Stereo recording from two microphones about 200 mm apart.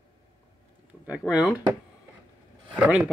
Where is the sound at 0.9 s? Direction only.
5° right (ahead or behind).